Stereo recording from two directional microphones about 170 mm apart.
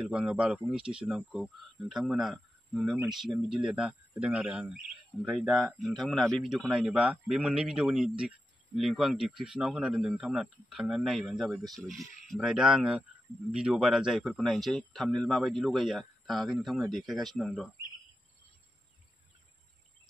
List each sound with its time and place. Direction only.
0.0 s speech: 5° right (ahead or behind)